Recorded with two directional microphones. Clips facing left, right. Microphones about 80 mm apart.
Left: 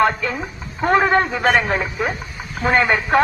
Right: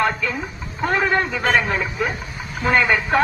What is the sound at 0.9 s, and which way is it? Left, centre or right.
A man's voice, left.